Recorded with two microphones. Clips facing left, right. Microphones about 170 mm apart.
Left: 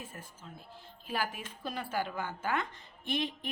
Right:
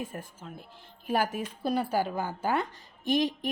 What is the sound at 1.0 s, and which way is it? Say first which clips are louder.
Speech: right 8 dB; 45° right (ahead or behind).